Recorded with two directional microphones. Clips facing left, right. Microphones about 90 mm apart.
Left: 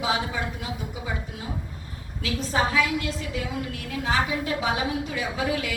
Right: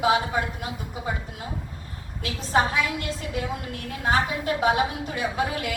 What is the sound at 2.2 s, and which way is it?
A woman's voice, 45° right (ahead or behind).